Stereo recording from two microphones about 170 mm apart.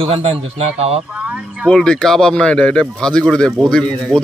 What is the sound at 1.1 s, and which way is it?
Speech, 5° right (ahead or behind).